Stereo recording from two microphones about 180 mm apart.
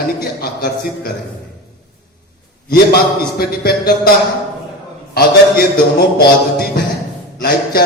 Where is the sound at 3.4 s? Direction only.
60° left (ahead or behind).